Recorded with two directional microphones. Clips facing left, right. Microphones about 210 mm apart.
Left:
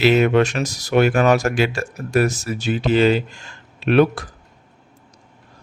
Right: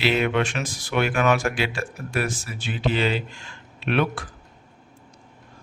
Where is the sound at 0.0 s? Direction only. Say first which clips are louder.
Left 7 dB; 45° left (ahead or behind).